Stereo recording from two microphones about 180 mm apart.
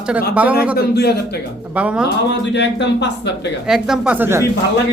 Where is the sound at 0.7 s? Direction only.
60° left (ahead or behind).